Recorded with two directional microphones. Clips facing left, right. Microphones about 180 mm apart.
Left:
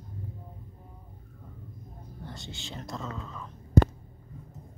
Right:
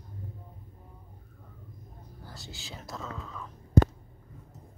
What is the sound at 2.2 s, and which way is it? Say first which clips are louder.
Speech: left 5 dB; centre (ahead or behind).